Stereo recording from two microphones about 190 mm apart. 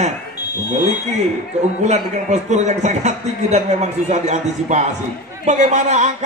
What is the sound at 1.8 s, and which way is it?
A man's voice, 35° right (ahead or behind).